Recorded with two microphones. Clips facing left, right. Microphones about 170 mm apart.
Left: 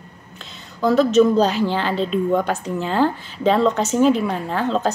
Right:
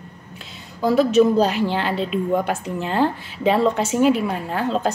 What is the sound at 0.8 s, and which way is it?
A woman's voice, 10° right (ahead or behind).